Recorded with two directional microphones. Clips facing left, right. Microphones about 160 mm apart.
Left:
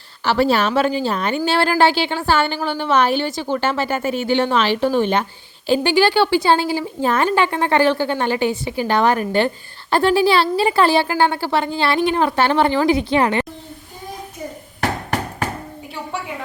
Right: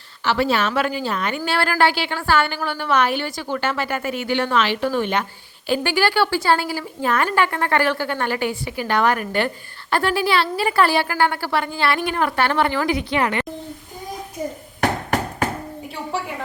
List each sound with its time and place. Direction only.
0.3 s a woman's voice: 35° left (ahead or behind)